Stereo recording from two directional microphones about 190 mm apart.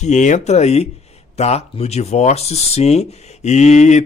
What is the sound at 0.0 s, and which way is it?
Speech, 40° left (ahead or behind).